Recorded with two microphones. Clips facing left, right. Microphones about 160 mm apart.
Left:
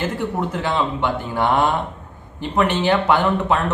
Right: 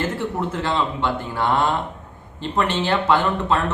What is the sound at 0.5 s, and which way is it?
A man's voice, 15° left (ahead or behind).